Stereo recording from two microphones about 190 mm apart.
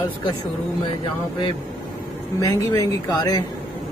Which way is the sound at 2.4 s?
20° left (ahead or behind).